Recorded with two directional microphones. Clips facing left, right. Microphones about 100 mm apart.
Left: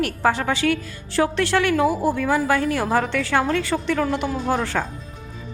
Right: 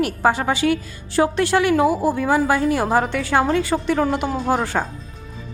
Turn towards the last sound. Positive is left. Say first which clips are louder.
# right 2 dB
turn(degrees=-15)  # may be behind; listen again after turning